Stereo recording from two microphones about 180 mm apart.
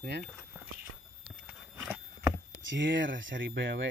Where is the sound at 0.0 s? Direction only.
60° right (ahead or behind).